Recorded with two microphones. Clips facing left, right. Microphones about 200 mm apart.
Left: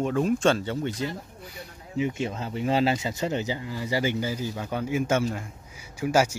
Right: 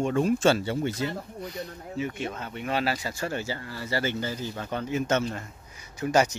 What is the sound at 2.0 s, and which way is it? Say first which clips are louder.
Speech: left 4 dB; 25° left (ahead or behind).